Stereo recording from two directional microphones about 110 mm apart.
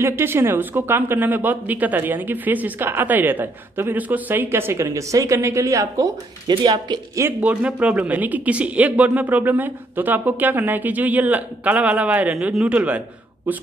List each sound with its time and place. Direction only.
0.0 s speech: 20° right (ahead or behind); by 7.0 s 40° right (ahead or behind)
7.2 s speech: 20° right (ahead or behind)